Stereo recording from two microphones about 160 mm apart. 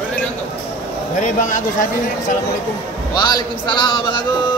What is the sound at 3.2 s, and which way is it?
A man's voice, 25° left (ahead or behind).